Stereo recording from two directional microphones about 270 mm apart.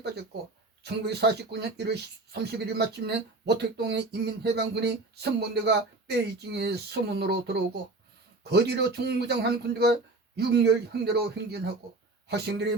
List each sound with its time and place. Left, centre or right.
0.9 s speech: right